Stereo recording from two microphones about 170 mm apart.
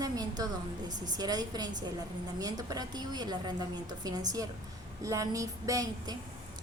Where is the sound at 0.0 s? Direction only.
20° right (ahead or behind).